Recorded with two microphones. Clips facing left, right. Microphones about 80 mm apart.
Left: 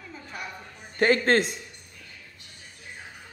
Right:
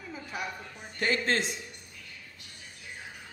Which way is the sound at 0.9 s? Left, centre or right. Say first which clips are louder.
Left 7 dB; left.